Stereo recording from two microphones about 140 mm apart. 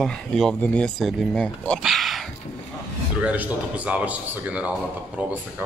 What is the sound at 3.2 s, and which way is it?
Speech, 10° right (ahead or behind).